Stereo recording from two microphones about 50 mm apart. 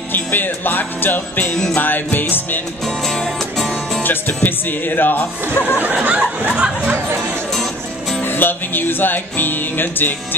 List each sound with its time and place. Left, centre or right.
0.1 s music: left
2.8 s music: centre
4.0 s music: left
5.8 s speech: right
7.2 s music: centre
8.2 s music: left